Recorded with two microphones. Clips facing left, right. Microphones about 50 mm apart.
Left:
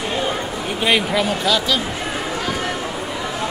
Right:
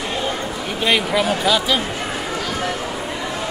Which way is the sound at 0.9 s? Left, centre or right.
Centre.